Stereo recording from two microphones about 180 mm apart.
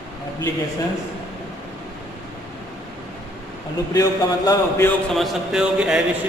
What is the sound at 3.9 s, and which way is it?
A man's voice, 20° left (ahead or behind).